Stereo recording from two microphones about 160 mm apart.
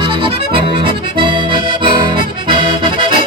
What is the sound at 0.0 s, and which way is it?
Accordion, 35° right (ahead or behind).